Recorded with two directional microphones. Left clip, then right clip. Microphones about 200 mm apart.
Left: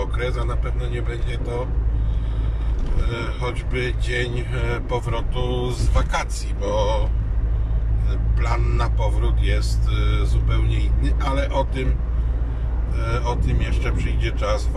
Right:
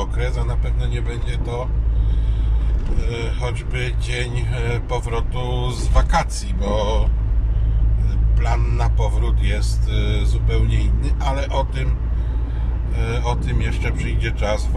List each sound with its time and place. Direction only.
0.0 s speech: 15° right (ahead or behind)
3.1 s speech: 15° right (ahead or behind)
8.4 s speech: 10° right (ahead or behind)
13.0 s speech: 15° right (ahead or behind)